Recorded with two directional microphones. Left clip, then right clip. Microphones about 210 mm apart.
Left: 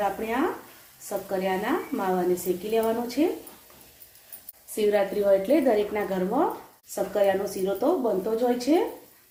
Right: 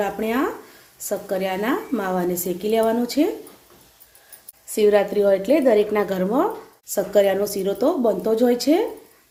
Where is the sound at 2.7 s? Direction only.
55° right (ahead or behind).